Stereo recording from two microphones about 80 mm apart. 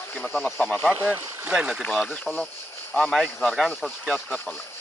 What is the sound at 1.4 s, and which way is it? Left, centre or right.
Speech, centre.